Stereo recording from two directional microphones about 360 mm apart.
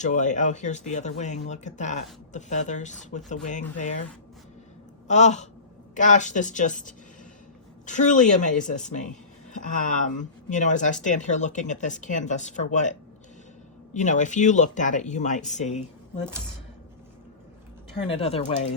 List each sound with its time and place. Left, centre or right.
0.0 s speech: centre
5.0 s speech: centre
13.9 s speech: centre
18.1 s speech: centre